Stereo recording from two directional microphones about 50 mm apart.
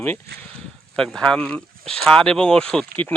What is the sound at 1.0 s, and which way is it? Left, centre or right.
Speech, centre.